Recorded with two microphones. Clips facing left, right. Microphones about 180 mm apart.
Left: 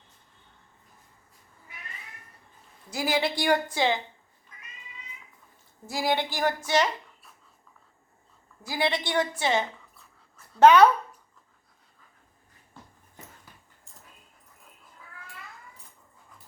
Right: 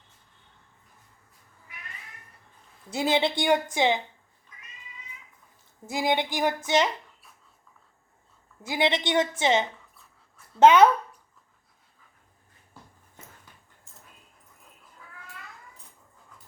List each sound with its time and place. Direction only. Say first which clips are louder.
2.9 s a woman's voice: right 2 dB; 25° right (ahead or behind)
5.8 s a woman's voice: right 1 dB; 20° right (ahead or behind)
8.6 s a woman's voice: right 2 dB; 20° right (ahead or behind)